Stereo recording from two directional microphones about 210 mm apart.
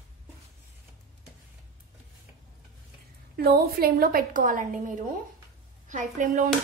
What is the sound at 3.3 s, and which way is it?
A woman's voice, 45° right (ahead or behind).